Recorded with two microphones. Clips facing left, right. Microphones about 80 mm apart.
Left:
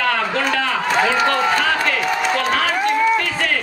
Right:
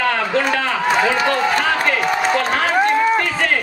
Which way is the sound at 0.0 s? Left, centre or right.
Right.